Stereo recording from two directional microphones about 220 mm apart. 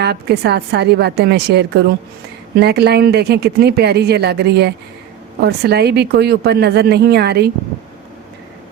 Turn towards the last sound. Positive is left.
turn(degrees=-50)  # may be behind; listen again after turning